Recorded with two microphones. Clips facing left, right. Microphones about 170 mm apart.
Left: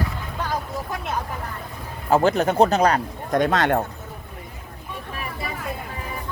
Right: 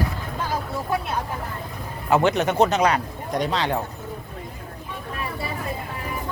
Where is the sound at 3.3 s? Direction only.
50° left (ahead or behind).